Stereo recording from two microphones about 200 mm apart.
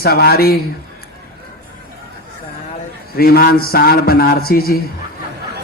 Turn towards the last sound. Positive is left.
turn(degrees=50)  # may be behind; listen again after turning